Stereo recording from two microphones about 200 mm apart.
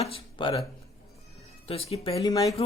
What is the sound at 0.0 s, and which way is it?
Speech, 25° left (ahead or behind).